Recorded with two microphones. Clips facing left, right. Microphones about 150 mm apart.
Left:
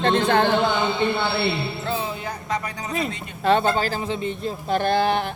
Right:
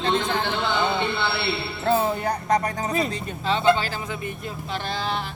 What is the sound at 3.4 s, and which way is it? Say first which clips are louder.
Speech: left 1 dB; 50° left (ahead or behind).